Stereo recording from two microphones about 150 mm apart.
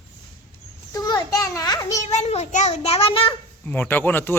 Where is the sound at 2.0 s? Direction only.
45° left (ahead or behind).